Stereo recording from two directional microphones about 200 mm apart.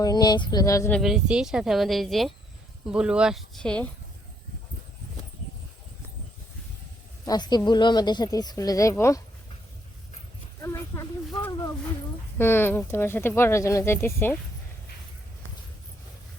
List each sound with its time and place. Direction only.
0.0 s speech: 20° left (ahead or behind)
0.9 s speech: centre (ahead or behind)
7.3 s speech: 20° left (ahead or behind)
10.6 s a sound: 15° left (ahead or behind)
12.4 s speech: 10° left (ahead or behind)